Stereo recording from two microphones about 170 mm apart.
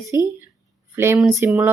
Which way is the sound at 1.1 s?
Centre (ahead or behind).